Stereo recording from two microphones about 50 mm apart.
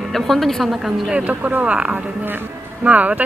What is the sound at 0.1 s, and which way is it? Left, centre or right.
Speech, centre.